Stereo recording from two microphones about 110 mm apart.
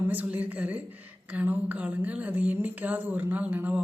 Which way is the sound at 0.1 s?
15° right (ahead or behind).